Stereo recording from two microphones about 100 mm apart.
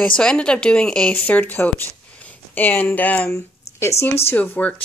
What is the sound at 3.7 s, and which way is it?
Speech, 30° left (ahead or behind).